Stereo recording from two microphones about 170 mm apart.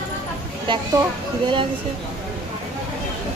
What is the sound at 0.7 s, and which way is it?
Speech, 25° right (ahead or behind).